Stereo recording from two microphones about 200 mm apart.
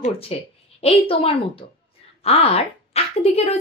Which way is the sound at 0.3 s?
30° left (ahead or behind).